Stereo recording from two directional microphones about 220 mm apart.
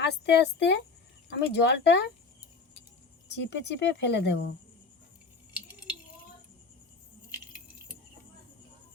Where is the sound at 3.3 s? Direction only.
50° left (ahead or behind).